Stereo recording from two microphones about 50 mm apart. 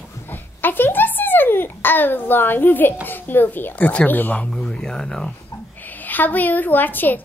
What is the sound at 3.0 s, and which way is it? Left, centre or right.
Speech, left.